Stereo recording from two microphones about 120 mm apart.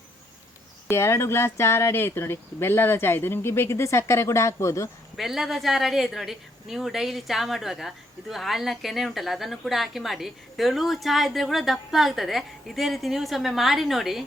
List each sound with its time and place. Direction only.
0.9 s speech: 20° left (ahead or behind)
5.1 s speech: centre (ahead or behind)